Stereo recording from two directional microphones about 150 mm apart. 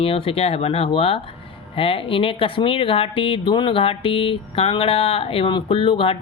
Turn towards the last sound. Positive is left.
turn(degrees=40)  # may be behind; listen again after turning